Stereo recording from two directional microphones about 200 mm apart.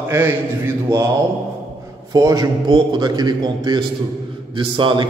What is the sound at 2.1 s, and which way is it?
A man's voice, 20° right (ahead or behind).